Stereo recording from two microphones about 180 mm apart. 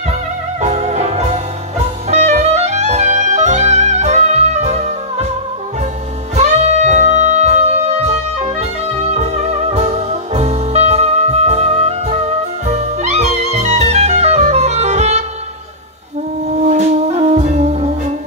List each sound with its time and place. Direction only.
0.6 s music: 40° right (ahead or behind)
6.3 s music: 40° right (ahead or behind)
16.6 s music: 35° right (ahead or behind)